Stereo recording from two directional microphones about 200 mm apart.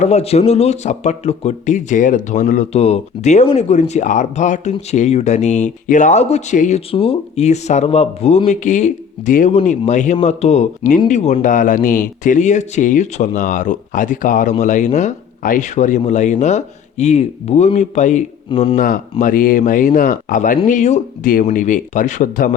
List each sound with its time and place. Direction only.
0.0 s speech: 35° left (ahead or behind)
19.2 s speech: 45° left (ahead or behind)